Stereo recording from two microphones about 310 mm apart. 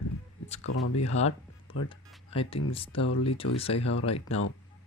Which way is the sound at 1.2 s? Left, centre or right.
Left.